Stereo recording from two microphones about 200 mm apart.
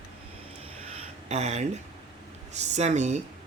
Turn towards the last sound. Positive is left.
turn(degrees=-35)  # may be behind; listen again after turning